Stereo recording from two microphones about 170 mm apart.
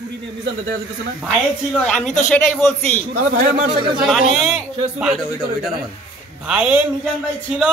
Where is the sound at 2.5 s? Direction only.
10° left (ahead or behind).